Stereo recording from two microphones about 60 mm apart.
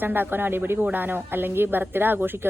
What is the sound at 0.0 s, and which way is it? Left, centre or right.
Speech, right.